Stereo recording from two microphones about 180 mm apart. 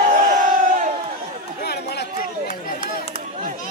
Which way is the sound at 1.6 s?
65° left (ahead or behind).